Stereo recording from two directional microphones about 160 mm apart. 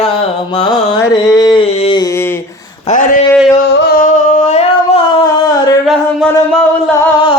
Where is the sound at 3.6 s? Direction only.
90° left.